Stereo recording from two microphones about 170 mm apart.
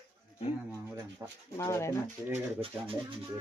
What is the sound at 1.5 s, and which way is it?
Speech, 20° left (ahead or behind).